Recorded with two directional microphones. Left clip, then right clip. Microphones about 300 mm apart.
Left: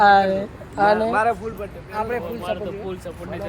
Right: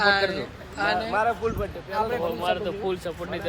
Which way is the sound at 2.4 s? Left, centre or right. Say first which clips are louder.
Right 1 dB; right.